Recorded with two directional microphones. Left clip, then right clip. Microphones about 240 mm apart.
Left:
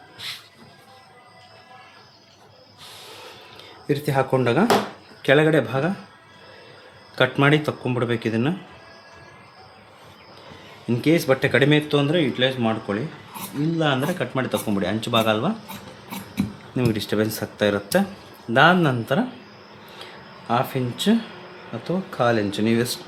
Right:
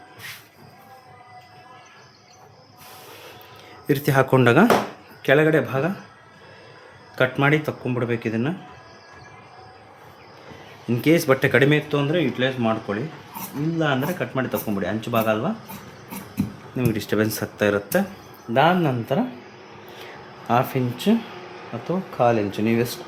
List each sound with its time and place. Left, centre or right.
3.8 s speech: centre
5.2 s speech: centre
7.2 s speech: centre
10.8 s speech: centre
11.9 s speech: centre
16.7 s speech: centre
17.0 s speech: centre
20.5 s speech: centre